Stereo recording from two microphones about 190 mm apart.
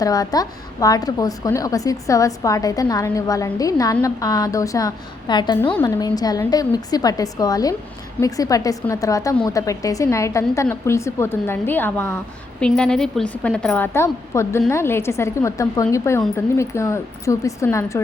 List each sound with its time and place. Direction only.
0.0 s a woman's voice: 20° left (ahead or behind)